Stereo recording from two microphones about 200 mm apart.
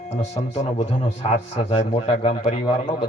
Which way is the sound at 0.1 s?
35° left (ahead or behind).